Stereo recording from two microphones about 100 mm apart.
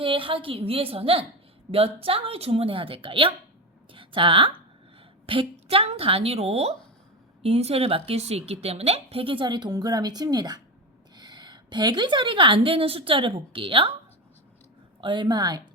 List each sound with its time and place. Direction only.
0.0 s a woman's voice: 60° right (ahead or behind)
15.0 s a woman's voice: 50° right (ahead or behind)